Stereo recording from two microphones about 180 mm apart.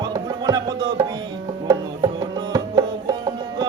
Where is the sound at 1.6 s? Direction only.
20° right (ahead or behind).